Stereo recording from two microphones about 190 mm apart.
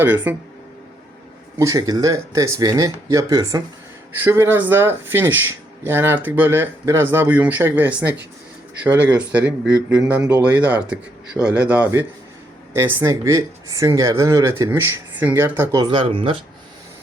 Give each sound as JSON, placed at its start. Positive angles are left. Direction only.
{"t": 0.0, "sound": "speech", "side_deg": -10}
{"t": 1.5, "sound": "speech", "side_deg": -15}